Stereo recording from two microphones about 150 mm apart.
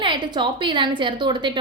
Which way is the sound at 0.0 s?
30° right (ahead or behind).